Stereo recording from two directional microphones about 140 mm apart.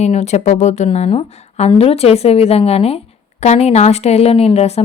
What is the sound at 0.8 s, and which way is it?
Speech, 45° left (ahead or behind).